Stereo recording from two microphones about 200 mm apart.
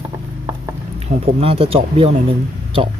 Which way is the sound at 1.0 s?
30° right (ahead or behind).